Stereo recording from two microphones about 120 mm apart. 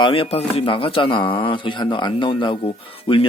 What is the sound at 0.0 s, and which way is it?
Speech, 50° left (ahead or behind).